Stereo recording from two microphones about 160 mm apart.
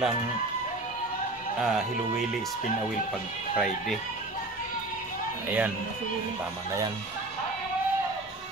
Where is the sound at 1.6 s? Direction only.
Centre (ahead or behind).